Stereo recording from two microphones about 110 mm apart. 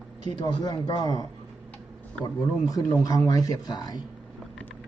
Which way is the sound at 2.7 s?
30° left (ahead or behind).